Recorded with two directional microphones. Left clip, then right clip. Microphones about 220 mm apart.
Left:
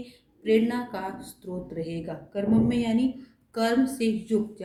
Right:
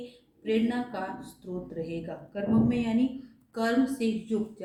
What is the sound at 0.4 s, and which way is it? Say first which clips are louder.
A woman's voice: left 5 dB; 45° left (ahead or behind).